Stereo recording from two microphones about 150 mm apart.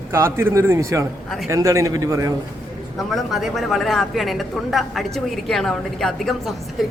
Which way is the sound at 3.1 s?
Centre (ahead or behind).